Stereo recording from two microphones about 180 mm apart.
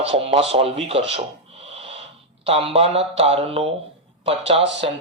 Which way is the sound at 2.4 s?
30° right (ahead or behind).